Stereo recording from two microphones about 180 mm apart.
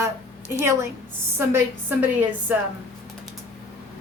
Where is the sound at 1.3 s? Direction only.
10° right (ahead or behind).